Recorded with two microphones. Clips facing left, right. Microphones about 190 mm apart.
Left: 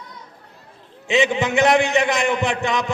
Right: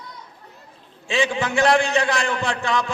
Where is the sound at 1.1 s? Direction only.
20° left (ahead or behind).